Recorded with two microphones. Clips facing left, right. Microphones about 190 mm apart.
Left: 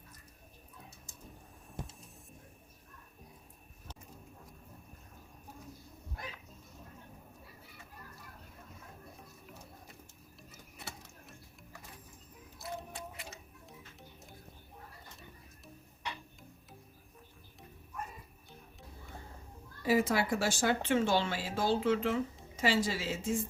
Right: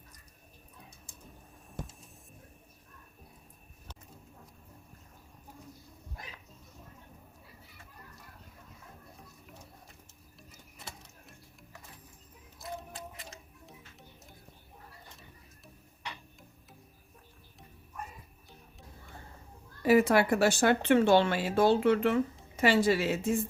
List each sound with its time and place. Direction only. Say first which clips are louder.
19.8 s speech: right 6 dB; 65° right (ahead or behind)